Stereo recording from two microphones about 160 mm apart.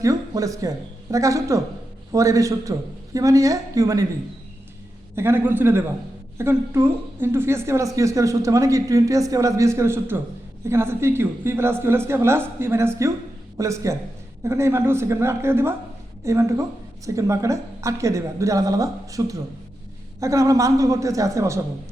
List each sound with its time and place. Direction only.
0.0 s a woman's voice: 20° right (ahead or behind)
5.1 s a woman's voice: 15° right (ahead or behind)